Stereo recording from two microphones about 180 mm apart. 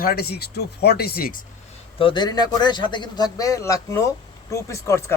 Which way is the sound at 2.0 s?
25° left (ahead or behind).